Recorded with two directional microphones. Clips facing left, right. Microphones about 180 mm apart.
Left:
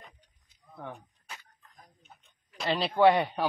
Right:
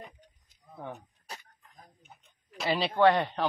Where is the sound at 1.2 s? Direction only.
40° right (ahead or behind).